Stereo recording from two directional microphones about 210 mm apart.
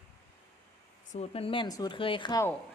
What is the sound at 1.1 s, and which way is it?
Speech, 30° left (ahead or behind).